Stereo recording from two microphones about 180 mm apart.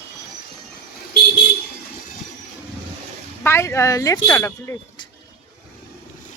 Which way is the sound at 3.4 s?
15° left (ahead or behind).